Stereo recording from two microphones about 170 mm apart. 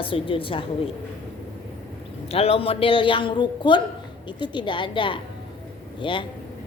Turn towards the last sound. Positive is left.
turn(degrees=30)  # may be behind; listen again after turning